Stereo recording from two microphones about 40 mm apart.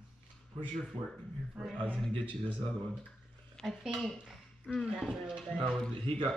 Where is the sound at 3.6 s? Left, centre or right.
Centre.